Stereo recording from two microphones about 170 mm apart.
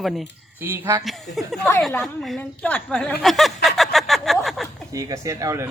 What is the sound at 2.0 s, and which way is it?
Speech, centre (ahead or behind).